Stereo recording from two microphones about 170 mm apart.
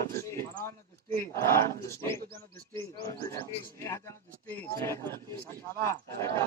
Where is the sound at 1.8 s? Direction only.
15° left (ahead or behind).